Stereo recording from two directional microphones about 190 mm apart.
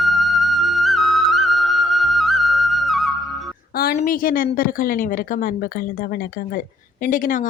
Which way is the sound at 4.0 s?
45° left (ahead or behind).